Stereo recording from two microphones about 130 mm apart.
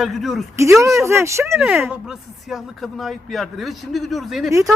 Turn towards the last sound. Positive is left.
turn(degrees=0)  # may be behind; listen again after turning